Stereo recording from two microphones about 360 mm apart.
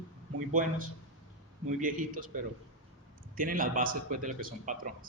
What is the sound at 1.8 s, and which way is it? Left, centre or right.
A man's voice, right.